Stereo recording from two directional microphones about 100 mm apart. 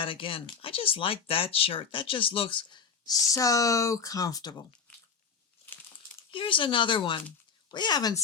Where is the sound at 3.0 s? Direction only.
35° left (ahead or behind).